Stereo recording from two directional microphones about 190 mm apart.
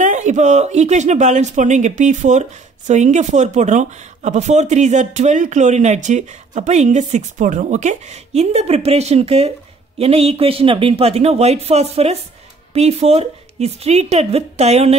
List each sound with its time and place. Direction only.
0.0 s speech: 40° right (ahead or behind)